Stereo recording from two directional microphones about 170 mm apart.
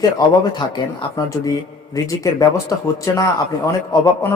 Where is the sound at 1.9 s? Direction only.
20° left (ahead or behind).